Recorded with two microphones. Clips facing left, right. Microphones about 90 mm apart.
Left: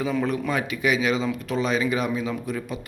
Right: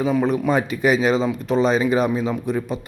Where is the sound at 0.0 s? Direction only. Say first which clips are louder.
Right 5 dB; 25° right (ahead or behind).